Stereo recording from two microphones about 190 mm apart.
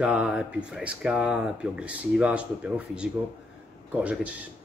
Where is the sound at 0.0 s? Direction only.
5° right (ahead or behind).